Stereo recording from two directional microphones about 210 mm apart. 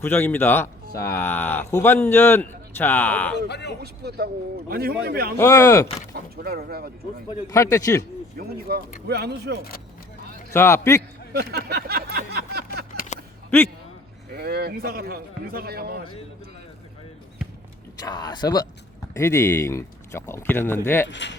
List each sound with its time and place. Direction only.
0.0 s speech: 10° left (ahead or behind)
3.3 s speech: 55° left (ahead or behind)
4.0 s a man's voice: 50° right (ahead or behind)
5.4 s speech: 10° left (ahead or behind)
6.1 s a man's voice: 45° right (ahead or behind)
7.3 s speech: 15° left (ahead or behind)
8.4 s a man's voice: 45° right (ahead or behind)
10.5 s speech: 10° left (ahead or behind)
11.3 s a man's voice: 50° right (ahead or behind)
14.3 s a man's voice: 50° right (ahead or behind)
18.0 s speech: 20° left (ahead or behind)
21.1 s speech: 55° left (ahead or behind)